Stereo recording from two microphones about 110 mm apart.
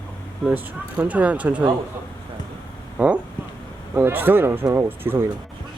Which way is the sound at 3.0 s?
15° right (ahead or behind).